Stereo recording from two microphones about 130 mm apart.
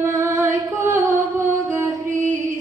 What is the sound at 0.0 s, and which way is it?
Singing, 20° right (ahead or behind).